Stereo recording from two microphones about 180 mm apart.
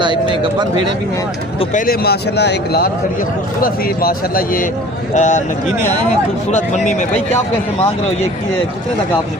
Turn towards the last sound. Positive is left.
turn(degrees=40)  # may be behind; listen again after turning